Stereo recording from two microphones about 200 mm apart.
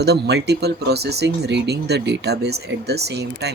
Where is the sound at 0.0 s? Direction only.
55° right (ahead or behind).